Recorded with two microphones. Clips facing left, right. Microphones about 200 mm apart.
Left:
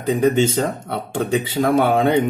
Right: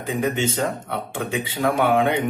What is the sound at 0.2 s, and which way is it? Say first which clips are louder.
Speech: left 5 dB; 40° left (ahead or behind).